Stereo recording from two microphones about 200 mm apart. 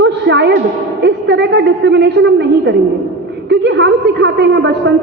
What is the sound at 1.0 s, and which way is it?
A woman's voice, 60° right (ahead or behind).